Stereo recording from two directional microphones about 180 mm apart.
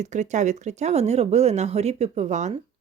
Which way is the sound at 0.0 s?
40° right (ahead or behind).